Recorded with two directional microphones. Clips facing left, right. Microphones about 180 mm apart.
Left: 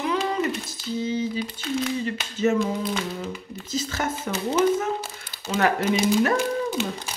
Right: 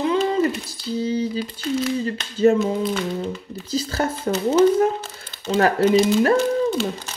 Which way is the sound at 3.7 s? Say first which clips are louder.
Right 4 dB; 35° right (ahead or behind).